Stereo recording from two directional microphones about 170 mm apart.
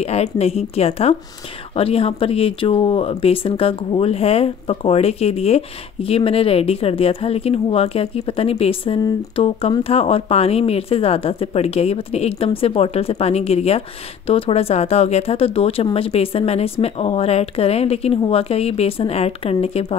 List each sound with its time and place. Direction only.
0.0 s speech: 40° left (ahead or behind)